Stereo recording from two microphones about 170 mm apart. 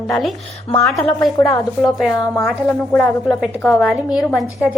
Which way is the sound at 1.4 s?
20° left (ahead or behind).